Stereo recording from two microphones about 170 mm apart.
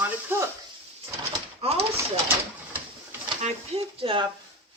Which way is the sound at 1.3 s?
35° right (ahead or behind).